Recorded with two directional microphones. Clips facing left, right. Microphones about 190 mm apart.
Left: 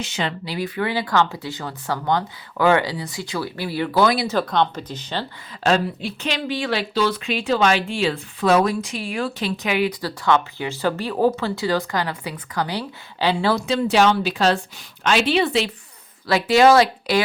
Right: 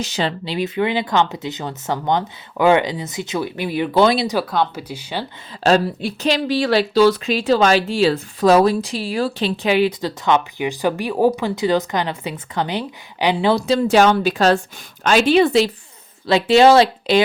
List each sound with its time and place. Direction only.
0.0 s speech: 35° right (ahead or behind)
4.4 s speech: 5° right (ahead or behind)
5.6 s speech: 35° right (ahead or behind); by 13.6 s 15° right (ahead or behind)
13.6 s speech: 40° right (ahead or behind)
16.2 s speech: 25° right (ahead or behind)